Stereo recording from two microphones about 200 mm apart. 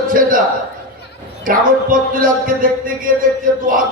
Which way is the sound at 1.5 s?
45° right (ahead or behind).